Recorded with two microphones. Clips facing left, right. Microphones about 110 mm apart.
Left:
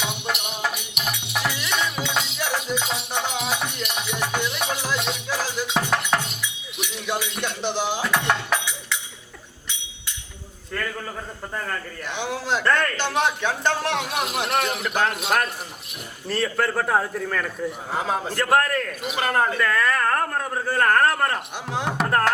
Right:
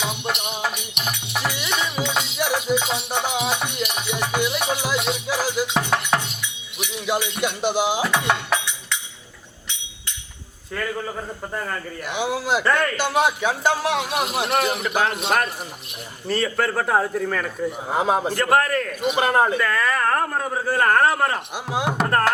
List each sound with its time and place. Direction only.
0.0 s music: centre (ahead or behind)
6.7 s a sound: centre (ahead or behind)
7.4 s cutlery: 10° right (ahead or behind)
8.1 s music: 5° right (ahead or behind)
10.7 s a man's voice: 5° right (ahead or behind)
17.9 s a man's voice: 20° right (ahead or behind)
18.3 s a man's voice: centre (ahead or behind)
19.2 s cutlery: 20° right (ahead or behind)
19.5 s a man's voice: centre (ahead or behind)